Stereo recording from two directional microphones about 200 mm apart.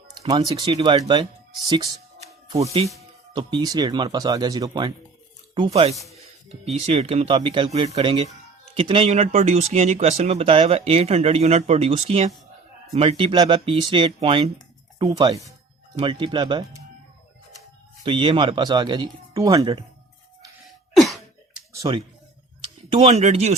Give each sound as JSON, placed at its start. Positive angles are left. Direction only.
{"t": 0.3, "sound": "speech", "side_deg": -20}
{"t": 16.0, "sound": "speech", "side_deg": -25}
{"t": 18.0, "sound": "speech", "side_deg": -25}
{"t": 20.7, "sound": "cough", "side_deg": 0}
{"t": 21.7, "sound": "clicking", "side_deg": -15}
{"t": 22.9, "sound": "speech", "side_deg": -30}